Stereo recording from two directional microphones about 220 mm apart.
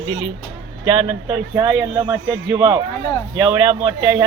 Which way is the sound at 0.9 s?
25° right (ahead or behind).